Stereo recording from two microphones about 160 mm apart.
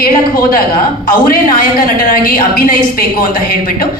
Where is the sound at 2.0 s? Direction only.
60° left (ahead or behind).